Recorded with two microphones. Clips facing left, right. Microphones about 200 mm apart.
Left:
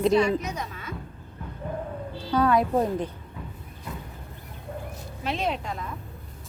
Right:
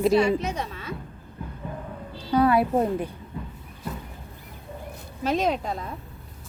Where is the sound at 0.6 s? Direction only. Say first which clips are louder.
Right 3 dB; 30° right (ahead or behind).